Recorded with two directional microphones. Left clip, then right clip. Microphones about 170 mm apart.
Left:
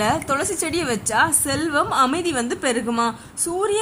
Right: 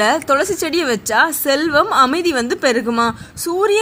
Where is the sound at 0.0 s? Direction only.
30° right (ahead or behind).